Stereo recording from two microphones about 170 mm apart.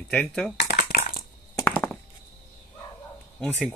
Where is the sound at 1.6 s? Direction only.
10° left (ahead or behind).